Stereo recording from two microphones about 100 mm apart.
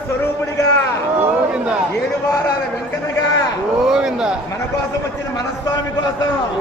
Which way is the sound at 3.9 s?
5° right (ahead or behind).